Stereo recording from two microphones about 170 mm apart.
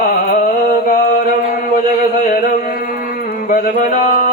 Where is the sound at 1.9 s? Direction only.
55° left (ahead or behind).